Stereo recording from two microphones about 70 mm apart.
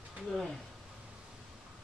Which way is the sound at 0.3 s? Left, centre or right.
Centre.